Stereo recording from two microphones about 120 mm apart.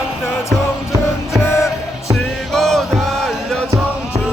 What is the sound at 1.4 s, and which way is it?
Music, 25° left (ahead or behind).